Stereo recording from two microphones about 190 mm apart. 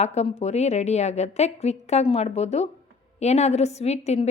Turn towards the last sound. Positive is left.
turn(degrees=35)  # may be behind; listen again after turning